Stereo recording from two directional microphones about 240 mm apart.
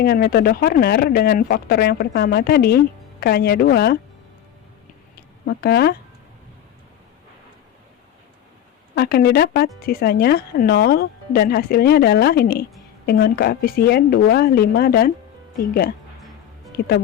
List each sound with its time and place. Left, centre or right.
0.0 s speech: left
5.5 s speech: left
9.0 s speech: left